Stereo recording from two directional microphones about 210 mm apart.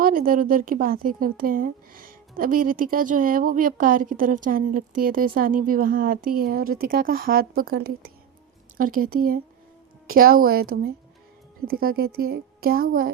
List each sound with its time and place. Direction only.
0.0 s speech: 40° right (ahead or behind)